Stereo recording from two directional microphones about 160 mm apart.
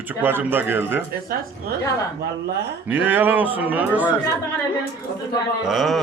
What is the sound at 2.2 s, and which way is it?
Speech, 90° right.